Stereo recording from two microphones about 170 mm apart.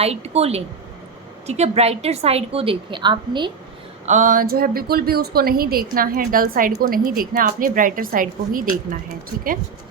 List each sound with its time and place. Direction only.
0.0 s a woman's voice: 35° right (ahead or behind)
4.0 s a woman's voice: 45° right (ahead or behind)